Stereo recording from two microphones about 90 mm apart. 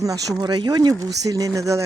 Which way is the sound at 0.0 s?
45° right (ahead or behind).